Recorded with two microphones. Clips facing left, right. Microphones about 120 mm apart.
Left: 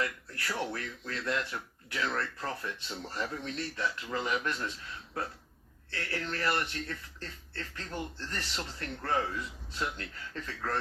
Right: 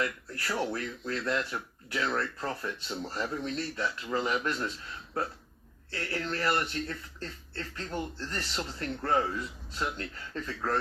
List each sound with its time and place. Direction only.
0.0 s speech: 30° right (ahead or behind)
5.9 s speech: 30° right (ahead or behind)